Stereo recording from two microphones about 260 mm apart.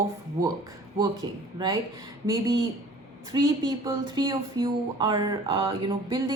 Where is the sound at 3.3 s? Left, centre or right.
Centre.